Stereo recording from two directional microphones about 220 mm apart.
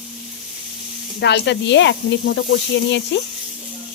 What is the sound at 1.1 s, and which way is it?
Speech, 50° left (ahead or behind).